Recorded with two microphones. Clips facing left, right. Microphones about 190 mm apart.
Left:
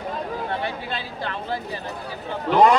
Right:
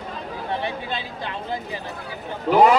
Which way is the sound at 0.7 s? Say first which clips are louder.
Right 1 dB; 20° right (ahead or behind).